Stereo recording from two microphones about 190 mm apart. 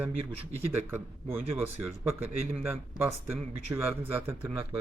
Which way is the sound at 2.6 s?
10° right (ahead or behind).